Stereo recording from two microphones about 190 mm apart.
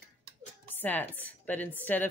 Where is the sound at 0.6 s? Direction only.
10° left (ahead or behind).